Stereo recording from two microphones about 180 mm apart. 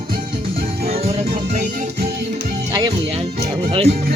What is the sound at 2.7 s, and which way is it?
Music, 20° right (ahead or behind).